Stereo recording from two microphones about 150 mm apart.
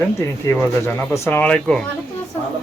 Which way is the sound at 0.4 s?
20° left (ahead or behind).